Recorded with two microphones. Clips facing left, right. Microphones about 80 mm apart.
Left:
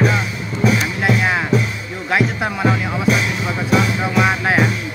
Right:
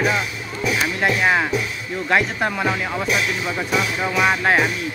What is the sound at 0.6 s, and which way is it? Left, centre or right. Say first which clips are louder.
Music: left 6 dB; left.